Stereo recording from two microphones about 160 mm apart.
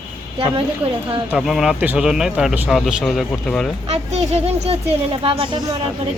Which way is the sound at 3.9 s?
40° right (ahead or behind).